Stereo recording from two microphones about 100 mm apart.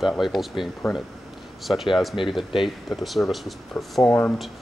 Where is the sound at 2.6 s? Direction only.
Centre (ahead or behind).